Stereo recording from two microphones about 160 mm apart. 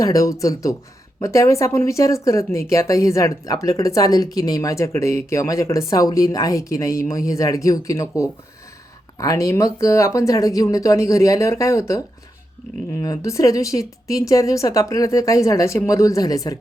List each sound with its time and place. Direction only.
0.0 s speech: 20° left (ahead or behind)